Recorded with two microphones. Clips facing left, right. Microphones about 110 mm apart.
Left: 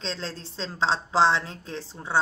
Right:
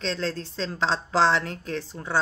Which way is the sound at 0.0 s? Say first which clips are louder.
Right 5 dB; 20° left (ahead or behind).